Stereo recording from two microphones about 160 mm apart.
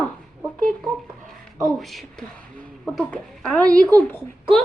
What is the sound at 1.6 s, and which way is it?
Speech, centre (ahead or behind).